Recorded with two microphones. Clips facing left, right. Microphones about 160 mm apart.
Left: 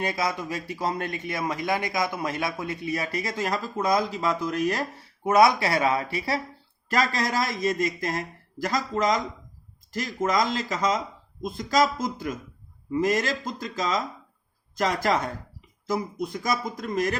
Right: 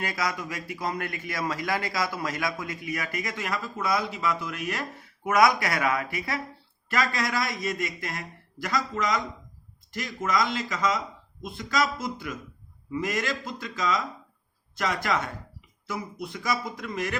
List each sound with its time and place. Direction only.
0.0 s a man's voice: 25° left (ahead or behind)
16.2 s a man's voice: 40° left (ahead or behind)